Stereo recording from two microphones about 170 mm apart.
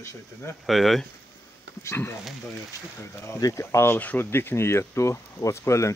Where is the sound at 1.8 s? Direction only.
15° left (ahead or behind).